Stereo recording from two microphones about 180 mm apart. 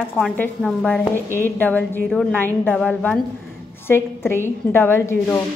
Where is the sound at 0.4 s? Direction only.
5° left (ahead or behind).